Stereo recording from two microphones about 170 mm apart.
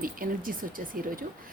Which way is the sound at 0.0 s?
55° right (ahead or behind).